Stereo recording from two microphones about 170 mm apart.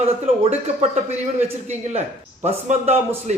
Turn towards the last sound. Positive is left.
turn(degrees=-40)  # may be behind; listen again after turning